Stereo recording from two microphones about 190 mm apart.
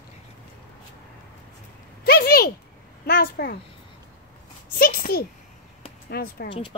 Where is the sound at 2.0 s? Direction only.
50° left (ahead or behind).